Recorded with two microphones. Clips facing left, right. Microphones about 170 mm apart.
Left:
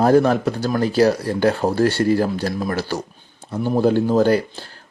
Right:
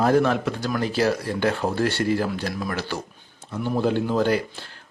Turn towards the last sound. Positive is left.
turn(degrees=40)  # may be behind; listen again after turning